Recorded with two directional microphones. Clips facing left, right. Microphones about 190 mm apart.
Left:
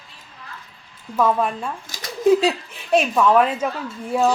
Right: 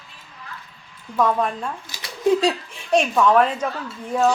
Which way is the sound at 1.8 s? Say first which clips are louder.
Left 2 dB; 45° left (ahead or behind).